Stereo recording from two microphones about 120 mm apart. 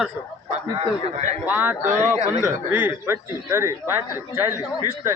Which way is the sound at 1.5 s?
15° right (ahead or behind).